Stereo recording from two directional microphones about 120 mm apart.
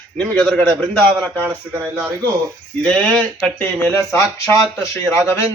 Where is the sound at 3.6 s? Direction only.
20° left (ahead or behind).